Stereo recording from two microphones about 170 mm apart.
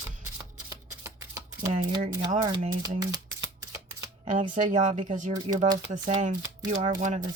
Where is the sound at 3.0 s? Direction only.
20° right (ahead or behind).